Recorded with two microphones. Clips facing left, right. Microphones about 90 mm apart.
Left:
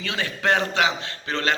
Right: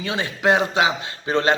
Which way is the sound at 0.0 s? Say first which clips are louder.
Right 4 dB; 20° right (ahead or behind).